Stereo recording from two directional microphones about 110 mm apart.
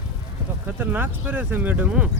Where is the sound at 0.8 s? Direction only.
20° right (ahead or behind).